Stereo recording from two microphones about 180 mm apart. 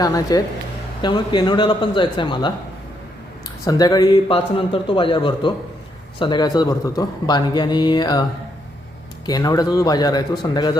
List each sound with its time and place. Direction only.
0.0 s a man's voice: 20° left (ahead or behind)
3.6 s a man's voice: 20° left (ahead or behind)